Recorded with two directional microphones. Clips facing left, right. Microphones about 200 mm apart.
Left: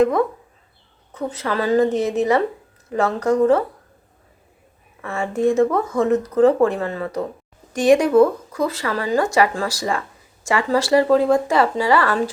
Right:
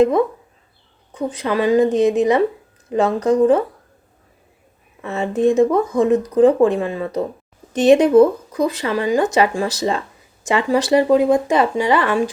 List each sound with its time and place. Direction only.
1.1 s speech: 15° right (ahead or behind)
5.0 s speech: 20° right (ahead or behind)